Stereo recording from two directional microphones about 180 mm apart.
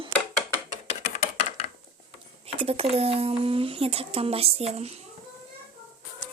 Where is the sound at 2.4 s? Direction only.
35° right (ahead or behind).